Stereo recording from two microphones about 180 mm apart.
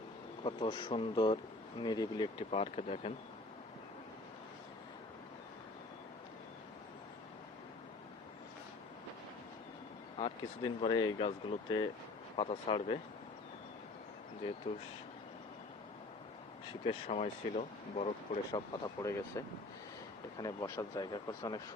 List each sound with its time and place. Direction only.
0.4 s speech: 25° left (ahead or behind)
10.2 s speech: 30° left (ahead or behind)
16.8 s speech: 35° left (ahead or behind)
18.5 s speech: 20° left (ahead or behind)